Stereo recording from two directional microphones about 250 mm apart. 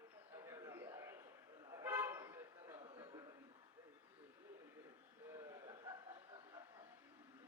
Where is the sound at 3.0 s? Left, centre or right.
Centre.